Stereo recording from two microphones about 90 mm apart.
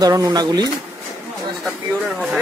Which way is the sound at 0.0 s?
45° right (ahead or behind).